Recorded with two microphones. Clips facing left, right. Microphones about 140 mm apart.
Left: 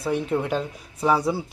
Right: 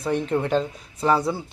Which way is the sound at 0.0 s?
10° left (ahead or behind).